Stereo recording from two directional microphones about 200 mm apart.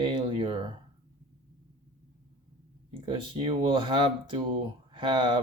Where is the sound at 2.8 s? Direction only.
25° right (ahead or behind).